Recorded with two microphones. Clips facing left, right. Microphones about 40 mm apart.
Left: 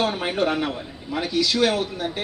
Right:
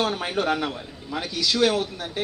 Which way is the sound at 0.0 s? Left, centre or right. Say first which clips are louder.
Left 2 dB; left.